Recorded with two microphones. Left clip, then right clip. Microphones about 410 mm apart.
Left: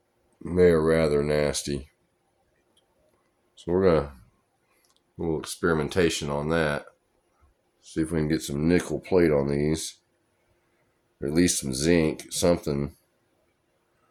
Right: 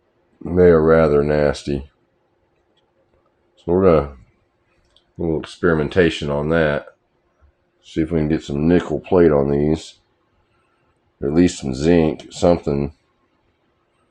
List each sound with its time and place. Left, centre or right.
0.5 s speech: left
3.6 s speech: left
5.1 s speech: left
7.9 s speech: left
11.2 s speech: left